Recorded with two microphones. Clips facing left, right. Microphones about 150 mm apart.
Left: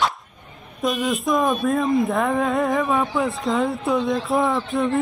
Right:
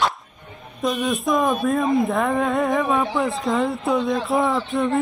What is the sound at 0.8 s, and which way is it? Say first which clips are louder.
Speech: even; centre (ahead or behind).